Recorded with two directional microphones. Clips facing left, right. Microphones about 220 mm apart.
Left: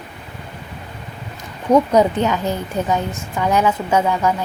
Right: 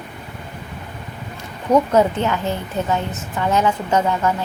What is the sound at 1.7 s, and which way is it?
A woman's voice, 15° left (ahead or behind).